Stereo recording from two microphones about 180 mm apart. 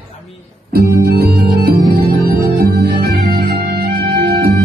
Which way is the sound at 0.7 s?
60° right (ahead or behind).